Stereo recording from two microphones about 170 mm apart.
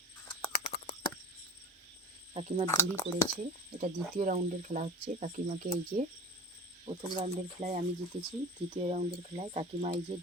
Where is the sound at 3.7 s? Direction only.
45° right (ahead or behind).